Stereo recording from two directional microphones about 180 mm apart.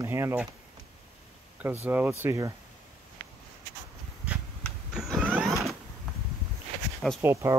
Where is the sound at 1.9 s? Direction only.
10° right (ahead or behind).